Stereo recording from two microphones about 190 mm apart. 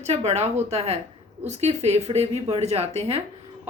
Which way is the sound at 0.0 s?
35° right (ahead or behind).